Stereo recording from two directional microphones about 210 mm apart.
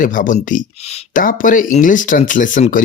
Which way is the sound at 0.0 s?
40° left (ahead or behind).